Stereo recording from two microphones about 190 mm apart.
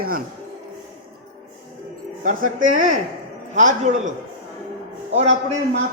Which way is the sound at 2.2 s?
45° right (ahead or behind).